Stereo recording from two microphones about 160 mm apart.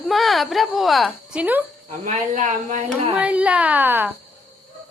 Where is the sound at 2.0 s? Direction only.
50° right (ahead or behind).